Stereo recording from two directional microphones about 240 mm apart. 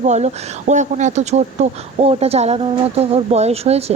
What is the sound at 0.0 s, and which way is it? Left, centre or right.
Speech, right.